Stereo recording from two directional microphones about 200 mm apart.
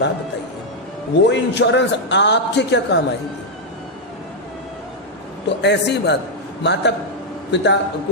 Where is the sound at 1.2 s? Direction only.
60° left (ahead or behind).